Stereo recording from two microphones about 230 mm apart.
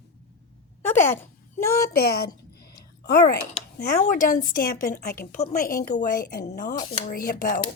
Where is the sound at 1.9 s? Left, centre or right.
Left.